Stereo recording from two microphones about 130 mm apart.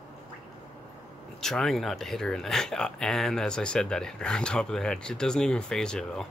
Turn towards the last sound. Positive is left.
turn(degrees=5)  # may be behind; listen again after turning